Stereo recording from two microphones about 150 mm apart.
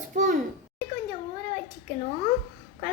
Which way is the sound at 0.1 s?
55° right (ahead or behind).